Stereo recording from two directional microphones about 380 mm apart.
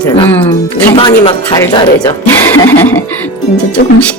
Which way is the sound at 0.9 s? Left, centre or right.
Centre.